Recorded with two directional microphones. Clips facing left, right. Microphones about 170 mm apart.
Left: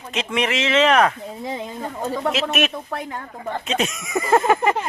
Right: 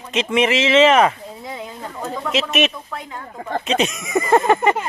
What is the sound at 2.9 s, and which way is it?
Speech, 60° left (ahead or behind).